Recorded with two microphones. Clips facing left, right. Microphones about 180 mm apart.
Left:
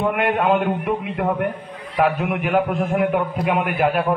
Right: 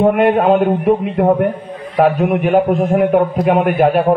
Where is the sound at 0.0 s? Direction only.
35° right (ahead or behind).